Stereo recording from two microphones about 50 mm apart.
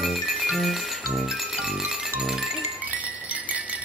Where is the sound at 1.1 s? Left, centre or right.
Centre.